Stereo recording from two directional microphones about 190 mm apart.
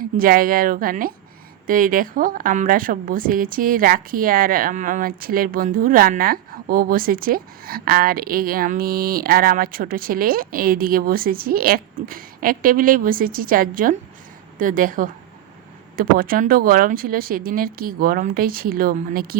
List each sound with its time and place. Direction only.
0.2 s a woman's voice: 50° right (ahead or behind)